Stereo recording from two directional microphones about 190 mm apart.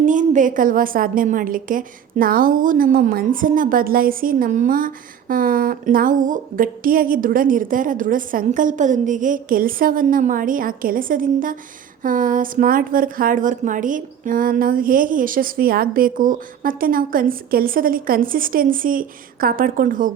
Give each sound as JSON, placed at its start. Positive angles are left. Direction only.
{"t": 0.0, "sound": "a woman's voice", "side_deg": -40}